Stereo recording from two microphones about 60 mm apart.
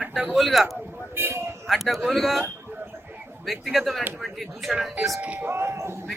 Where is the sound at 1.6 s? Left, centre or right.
Centre.